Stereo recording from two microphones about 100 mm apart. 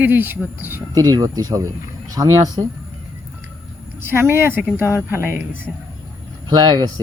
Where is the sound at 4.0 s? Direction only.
25° right (ahead or behind).